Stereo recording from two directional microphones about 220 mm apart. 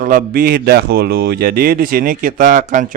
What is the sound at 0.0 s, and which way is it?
Speech, 40° right (ahead or behind).